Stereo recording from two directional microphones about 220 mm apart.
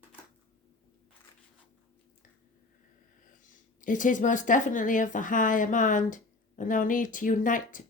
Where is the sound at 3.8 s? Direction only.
35° left (ahead or behind).